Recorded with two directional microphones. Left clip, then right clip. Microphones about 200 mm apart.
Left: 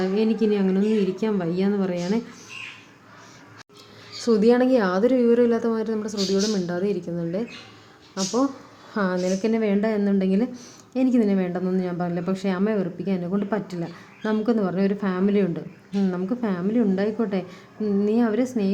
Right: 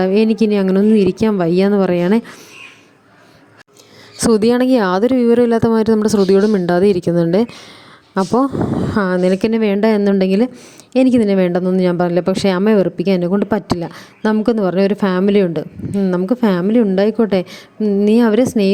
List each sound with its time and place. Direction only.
0.0 s a woman's voice: 40° right (ahead or behind)
4.2 s a woman's voice: 45° right (ahead or behind)